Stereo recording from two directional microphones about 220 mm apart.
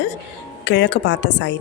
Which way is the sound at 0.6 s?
50° left (ahead or behind).